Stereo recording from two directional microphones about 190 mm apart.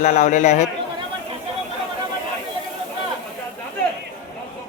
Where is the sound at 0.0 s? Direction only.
40° left (ahead or behind).